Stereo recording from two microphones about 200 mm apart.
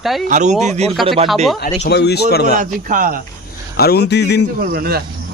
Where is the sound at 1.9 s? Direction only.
55° left (ahead or behind).